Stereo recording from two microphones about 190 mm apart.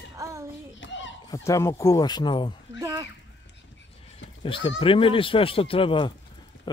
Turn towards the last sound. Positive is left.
turn(degrees=25)  # may be behind; listen again after turning